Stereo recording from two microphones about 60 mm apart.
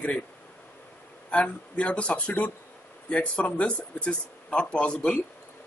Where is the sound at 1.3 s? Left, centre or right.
Left.